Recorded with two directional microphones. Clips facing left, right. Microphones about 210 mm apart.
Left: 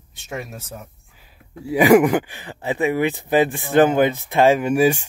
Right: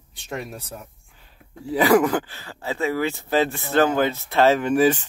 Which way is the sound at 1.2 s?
10° left (ahead or behind).